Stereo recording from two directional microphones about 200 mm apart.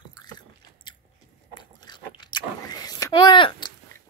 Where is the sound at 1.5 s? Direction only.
20° left (ahead or behind).